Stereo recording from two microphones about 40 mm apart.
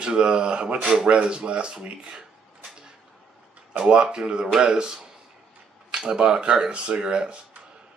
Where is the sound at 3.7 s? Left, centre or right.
Centre.